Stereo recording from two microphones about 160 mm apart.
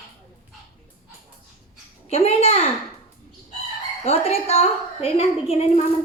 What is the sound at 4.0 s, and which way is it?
A woman's voice, 40° left (ahead or behind).